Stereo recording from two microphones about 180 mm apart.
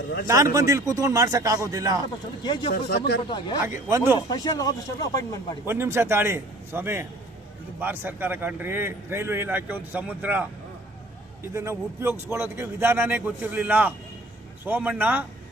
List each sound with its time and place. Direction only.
0.3 s a man's voice: 20° right (ahead or behind)
2.4 s speech: 25° left (ahead or behind)
3.6 s a man's voice: 15° right (ahead or behind)
4.3 s speech: 20° left (ahead or behind)
5.6 s a man's voice: 15° right (ahead or behind)
11.5 s a man's voice: 15° right (ahead or behind)